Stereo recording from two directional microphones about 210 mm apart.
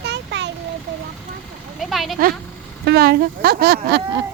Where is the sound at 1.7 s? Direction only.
Centre (ahead or behind).